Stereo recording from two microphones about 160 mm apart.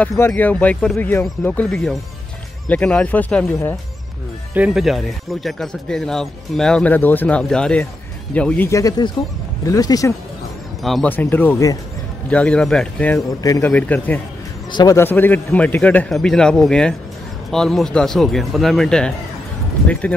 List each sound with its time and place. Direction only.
0.2 s a man's voice: 10° left (ahead or behind)
4.6 s speech: 5° right (ahead or behind); by 10.1 s 20° left (ahead or behind)
10.8 s speech: centre (ahead or behind)
11.1 s a man's voice: 10° left (ahead or behind)
13.4 s speech: 20° left (ahead or behind)
13.7 s a man's voice: 10° left (ahead or behind)
14.7 s a man's voice: 25° left (ahead or behind)
15.0 s a man's voice: 10° left (ahead or behind)